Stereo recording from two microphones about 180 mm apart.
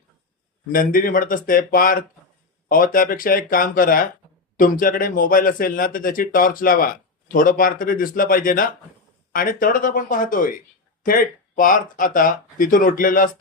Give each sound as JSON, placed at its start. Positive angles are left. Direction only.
{"t": 0.7, "sound": "speech", "side_deg": 50}